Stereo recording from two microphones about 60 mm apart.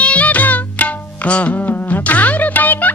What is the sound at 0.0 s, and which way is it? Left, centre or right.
Music, left.